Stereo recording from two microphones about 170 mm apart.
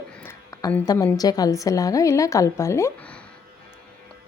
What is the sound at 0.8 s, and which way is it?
A woman's voice, 20° left (ahead or behind).